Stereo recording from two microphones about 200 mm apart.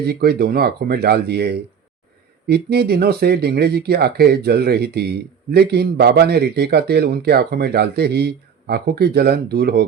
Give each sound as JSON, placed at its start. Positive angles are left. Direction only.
{"t": 0.0, "sound": "a man's voice", "side_deg": -55}